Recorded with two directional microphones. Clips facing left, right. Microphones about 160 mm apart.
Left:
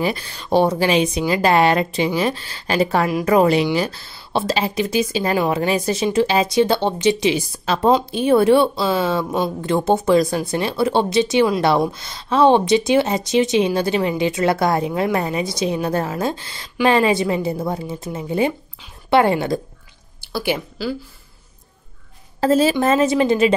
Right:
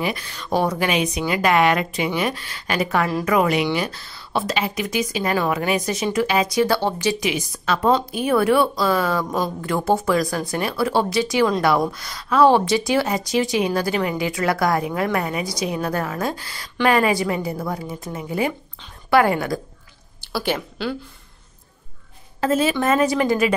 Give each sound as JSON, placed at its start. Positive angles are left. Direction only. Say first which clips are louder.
{"t": 0.0, "sound": "speech", "louder": "left 3 dB", "side_deg": 30}
{"t": 20.2, "sound": "speech", "louder": "left 2 dB", "side_deg": 10}
{"t": 22.4, "sound": "speech", "louder": "left 4 dB", "side_deg": 35}